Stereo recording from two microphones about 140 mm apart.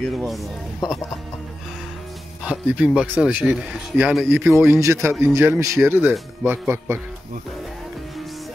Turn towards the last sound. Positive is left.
turn(degrees=-15)  # may be behind; listen again after turning